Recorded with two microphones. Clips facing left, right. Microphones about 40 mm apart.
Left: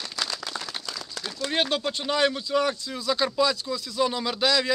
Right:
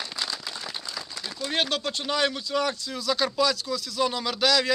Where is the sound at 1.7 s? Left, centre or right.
Centre.